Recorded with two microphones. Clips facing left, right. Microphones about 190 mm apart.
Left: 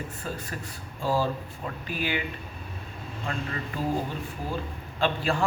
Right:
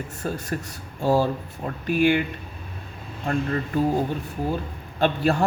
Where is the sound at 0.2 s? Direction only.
50° right (ahead or behind).